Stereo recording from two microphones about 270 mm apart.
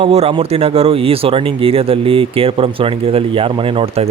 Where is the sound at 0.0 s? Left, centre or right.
Right.